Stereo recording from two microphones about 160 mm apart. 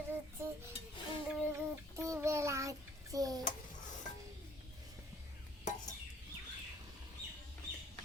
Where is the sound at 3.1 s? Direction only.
20° right (ahead or behind).